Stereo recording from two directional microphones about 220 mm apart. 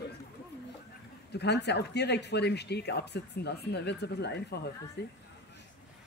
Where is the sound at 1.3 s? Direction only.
50° left (ahead or behind).